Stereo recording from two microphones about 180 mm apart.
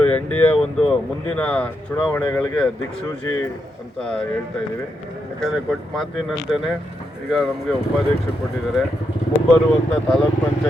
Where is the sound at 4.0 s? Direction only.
5° left (ahead or behind).